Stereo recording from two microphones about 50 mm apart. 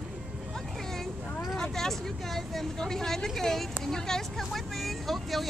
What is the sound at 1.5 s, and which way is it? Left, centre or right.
Vehicle, centre.